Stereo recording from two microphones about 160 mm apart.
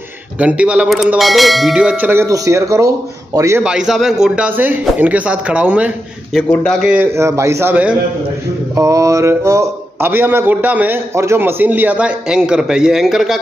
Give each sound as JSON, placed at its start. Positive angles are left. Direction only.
{"t": 0.4, "sound": "a man's voice", "side_deg": -10}
{"t": 3.6, "sound": "a man's voice", "side_deg": -5}
{"t": 6.5, "sound": "a man's voice", "side_deg": 5}
{"t": 8.7, "sound": "a man's voice", "side_deg": -20}